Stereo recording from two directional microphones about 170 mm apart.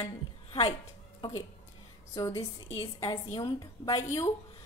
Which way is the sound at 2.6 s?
35° left (ahead or behind).